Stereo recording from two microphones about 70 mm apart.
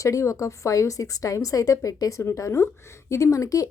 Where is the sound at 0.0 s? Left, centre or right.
Left.